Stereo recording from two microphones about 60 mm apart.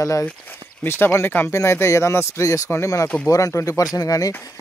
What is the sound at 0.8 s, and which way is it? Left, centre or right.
Speech, left.